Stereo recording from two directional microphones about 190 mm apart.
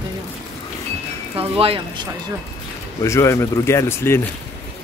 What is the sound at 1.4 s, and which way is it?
Speech, 30° right (ahead or behind).